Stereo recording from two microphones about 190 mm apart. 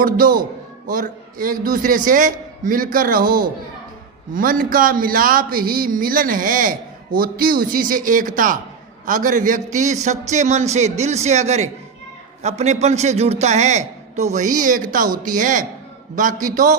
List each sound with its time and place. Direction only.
0.0 s a man's voice: 50° right (ahead or behind)